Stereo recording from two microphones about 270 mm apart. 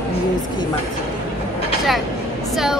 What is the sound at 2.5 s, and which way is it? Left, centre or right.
Speech, centre.